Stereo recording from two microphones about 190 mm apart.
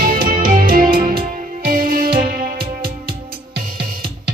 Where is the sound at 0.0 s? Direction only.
50° right (ahead or behind).